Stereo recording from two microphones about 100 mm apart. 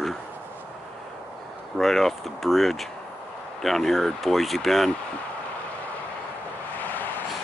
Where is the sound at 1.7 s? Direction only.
5° left (ahead or behind).